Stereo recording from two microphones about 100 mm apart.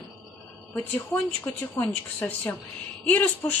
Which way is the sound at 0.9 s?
20° left (ahead or behind).